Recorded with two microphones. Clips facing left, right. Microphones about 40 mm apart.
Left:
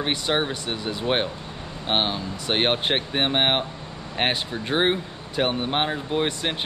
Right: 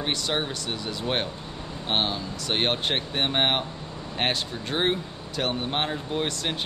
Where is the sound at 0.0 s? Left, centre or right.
Centre.